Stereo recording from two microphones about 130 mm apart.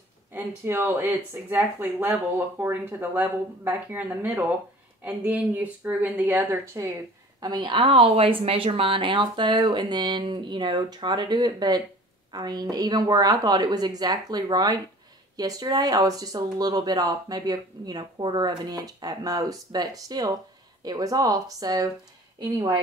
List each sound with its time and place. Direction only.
0.3 s speech: 20° right (ahead or behind)
7.3 s speech: 35° right (ahead or behind)